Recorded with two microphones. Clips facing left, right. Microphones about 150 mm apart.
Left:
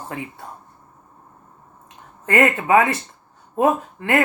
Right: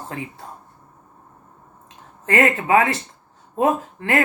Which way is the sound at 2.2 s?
30° right (ahead or behind).